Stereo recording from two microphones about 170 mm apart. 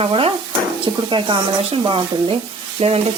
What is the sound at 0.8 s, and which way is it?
Speech, 30° right (ahead or behind).